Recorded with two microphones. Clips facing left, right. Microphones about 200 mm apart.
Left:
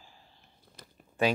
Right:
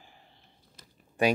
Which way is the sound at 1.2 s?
15° right (ahead or behind).